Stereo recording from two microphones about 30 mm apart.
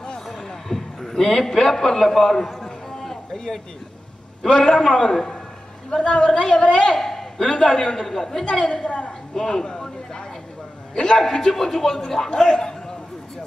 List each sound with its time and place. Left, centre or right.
0.4 s a sound: centre
4.4 s a man's voice: centre
5.9 s a woman's voice: left
6.9 s a sound: centre
7.6 s a man's voice: centre
8.5 s a woman's voice: left
8.8 s a man's voice: left
9.3 s a sound: centre
11.0 s a woman's voice: left